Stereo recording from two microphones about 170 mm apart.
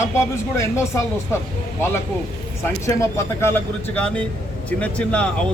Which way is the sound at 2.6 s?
15° left (ahead or behind).